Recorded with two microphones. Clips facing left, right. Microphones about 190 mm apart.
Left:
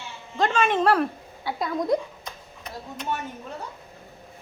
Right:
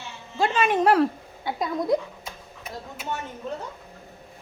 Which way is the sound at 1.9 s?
5° right (ahead or behind).